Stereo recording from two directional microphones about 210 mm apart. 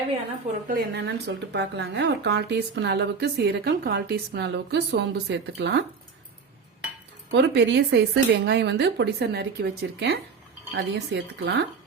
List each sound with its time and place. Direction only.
0.7 s speech: 55° right (ahead or behind)
7.3 s a woman's voice: 55° right (ahead or behind)